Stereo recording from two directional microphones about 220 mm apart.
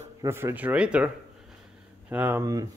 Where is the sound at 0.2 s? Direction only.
10° right (ahead or behind).